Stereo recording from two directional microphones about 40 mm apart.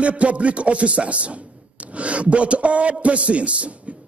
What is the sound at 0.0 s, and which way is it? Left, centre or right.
Speech, right.